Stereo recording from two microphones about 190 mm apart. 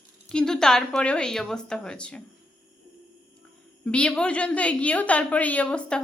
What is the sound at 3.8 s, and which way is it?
A woman's voice, 5° left (ahead or behind).